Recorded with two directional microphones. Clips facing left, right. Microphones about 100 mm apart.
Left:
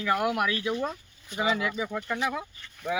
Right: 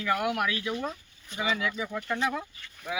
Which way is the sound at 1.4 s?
35° left (ahead or behind).